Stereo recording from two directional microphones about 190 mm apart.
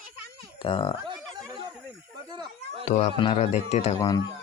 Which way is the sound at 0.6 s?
25° left (ahead or behind).